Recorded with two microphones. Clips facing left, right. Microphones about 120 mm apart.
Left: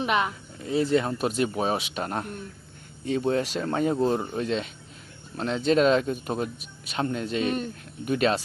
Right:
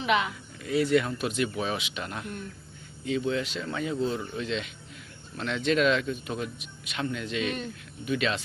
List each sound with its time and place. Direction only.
0.0 s speech: 45° left (ahead or behind)
0.6 s speech: 30° left (ahead or behind)